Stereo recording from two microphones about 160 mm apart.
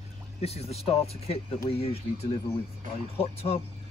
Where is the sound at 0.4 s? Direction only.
40° left (ahead or behind).